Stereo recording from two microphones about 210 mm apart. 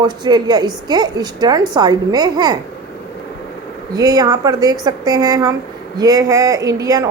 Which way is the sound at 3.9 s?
15° right (ahead or behind).